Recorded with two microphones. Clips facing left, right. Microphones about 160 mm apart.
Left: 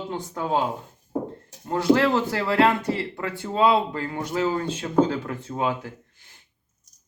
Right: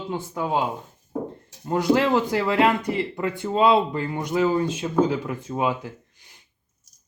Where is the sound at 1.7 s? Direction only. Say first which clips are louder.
Even; 15° right (ahead or behind).